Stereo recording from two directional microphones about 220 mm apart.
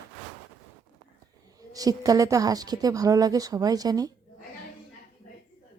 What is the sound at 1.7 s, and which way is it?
Speech, 15° right (ahead or behind).